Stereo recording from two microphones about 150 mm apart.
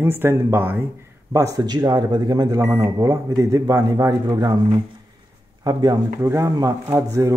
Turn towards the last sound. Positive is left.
turn(degrees=-20)  # may be behind; listen again after turning